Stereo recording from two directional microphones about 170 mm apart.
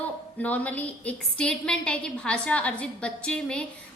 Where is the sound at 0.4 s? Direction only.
10° left (ahead or behind).